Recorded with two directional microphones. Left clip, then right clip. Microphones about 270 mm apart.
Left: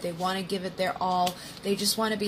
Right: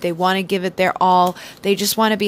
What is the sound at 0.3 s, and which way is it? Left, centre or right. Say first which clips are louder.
Speech: right 11 dB; right.